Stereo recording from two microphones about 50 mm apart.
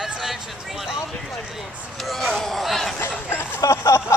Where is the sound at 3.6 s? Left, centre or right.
Left.